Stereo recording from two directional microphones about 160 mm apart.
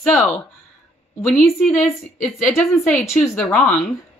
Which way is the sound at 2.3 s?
Centre (ahead or behind).